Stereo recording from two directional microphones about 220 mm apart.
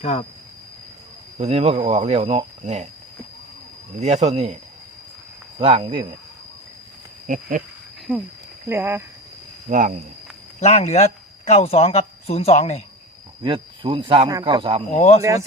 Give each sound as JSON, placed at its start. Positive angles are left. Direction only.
{"t": 0.0, "sound": "speech", "side_deg": 30}
{"t": 1.4, "sound": "speech", "side_deg": -30}
{"t": 3.9, "sound": "speech", "side_deg": -30}
{"t": 5.5, "sound": "speech", "side_deg": -25}
{"t": 7.3, "sound": "speech", "side_deg": -35}
{"t": 8.1, "sound": "speech", "side_deg": -10}
{"t": 9.6, "sound": "speech", "side_deg": -35}
{"t": 10.6, "sound": "speech", "side_deg": 30}
{"t": 13.4, "sound": "speech", "side_deg": -20}
{"t": 14.9, "sound": "speech", "side_deg": 30}